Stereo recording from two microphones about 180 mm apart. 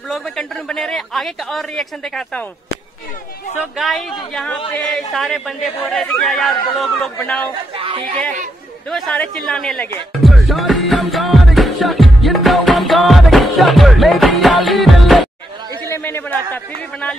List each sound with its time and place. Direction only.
0.1 s a man's voice: 5° left (ahead or behind)
3.7 s speech: centre (ahead or behind)
7.7 s speech: 30° right (ahead or behind)
8.9 s music: centre (ahead or behind)
15.8 s a sound: 15° left (ahead or behind)